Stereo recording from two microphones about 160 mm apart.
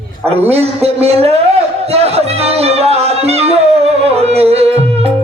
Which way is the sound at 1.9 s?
40° right (ahead or behind).